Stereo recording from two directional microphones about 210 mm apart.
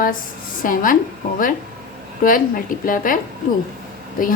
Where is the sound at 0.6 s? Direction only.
40° left (ahead or behind).